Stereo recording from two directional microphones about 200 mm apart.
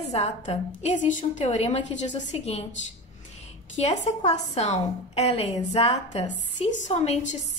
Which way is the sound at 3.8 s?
35° left (ahead or behind).